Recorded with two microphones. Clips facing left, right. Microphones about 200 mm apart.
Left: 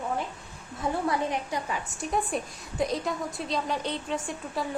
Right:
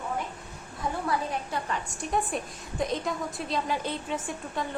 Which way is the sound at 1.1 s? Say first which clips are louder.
Left 2 dB; 15° left (ahead or behind).